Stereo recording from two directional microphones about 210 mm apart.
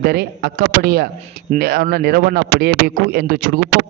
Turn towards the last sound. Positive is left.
turn(degrees=-45)  # may be behind; listen again after turning